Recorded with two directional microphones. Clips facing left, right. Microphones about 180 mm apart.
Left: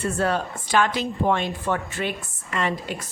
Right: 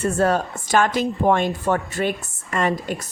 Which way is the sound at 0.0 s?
45° right (ahead or behind).